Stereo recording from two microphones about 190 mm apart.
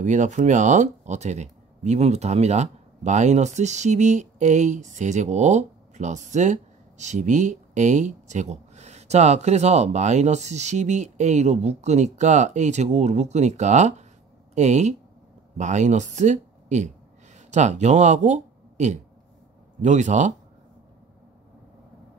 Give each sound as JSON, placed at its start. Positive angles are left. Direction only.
{"t": 0.0, "sound": "speech", "side_deg": -40}